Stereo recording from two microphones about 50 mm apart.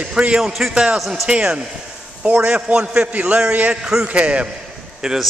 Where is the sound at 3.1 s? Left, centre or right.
Right.